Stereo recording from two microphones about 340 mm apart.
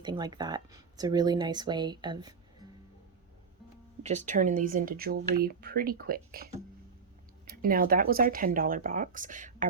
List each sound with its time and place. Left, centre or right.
0.0 s speech: centre
4.0 s speech: right